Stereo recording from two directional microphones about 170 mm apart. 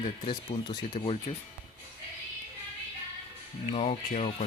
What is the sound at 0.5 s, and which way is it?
Speech, 50° left (ahead or behind).